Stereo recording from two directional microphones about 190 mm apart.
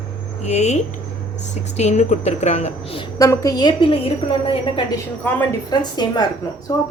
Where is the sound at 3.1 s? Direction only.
15° left (ahead or behind).